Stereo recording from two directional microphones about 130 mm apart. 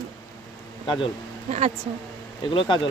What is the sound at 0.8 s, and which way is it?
Speech, 40° left (ahead or behind).